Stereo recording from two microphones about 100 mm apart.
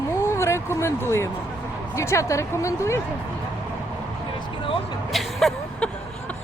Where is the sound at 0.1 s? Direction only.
25° left (ahead or behind).